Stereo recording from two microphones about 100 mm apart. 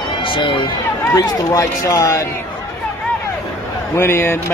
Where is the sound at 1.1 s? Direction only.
35° left (ahead or behind).